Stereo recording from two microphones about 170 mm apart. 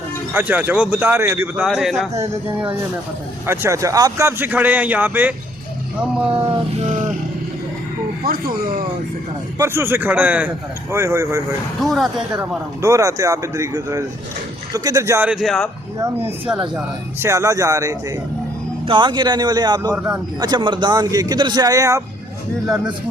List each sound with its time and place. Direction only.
0.3 s speech: 10° right (ahead or behind)
1.6 s speech: centre (ahead or behind)
3.4 s speech: 15° right (ahead or behind)
8.2 s speech: 60° right (ahead or behind)
9.6 s speech: 15° right (ahead or behind)
11.8 s speech: centre (ahead or behind)
12.4 s speech: 15° right (ahead or behind)
20.0 s speech: 5° right (ahead or behind)
20.4 s speech: 25° right (ahead or behind)
22.6 s speech: 5° right (ahead or behind)